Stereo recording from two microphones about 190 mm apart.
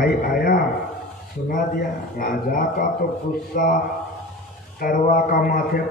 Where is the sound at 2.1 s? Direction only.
50° left (ahead or behind).